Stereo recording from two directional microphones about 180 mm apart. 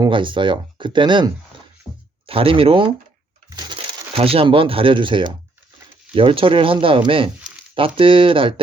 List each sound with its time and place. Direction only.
0.0 s speech: 25° right (ahead or behind)
1.9 s speech: centre (ahead or behind)
2.2 s speech: 30° right (ahead or behind)